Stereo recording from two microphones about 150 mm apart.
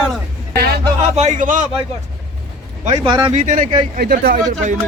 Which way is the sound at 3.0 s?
35° right (ahead or behind).